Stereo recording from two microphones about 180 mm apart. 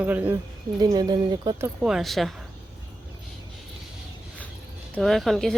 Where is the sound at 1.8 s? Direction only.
Centre (ahead or behind).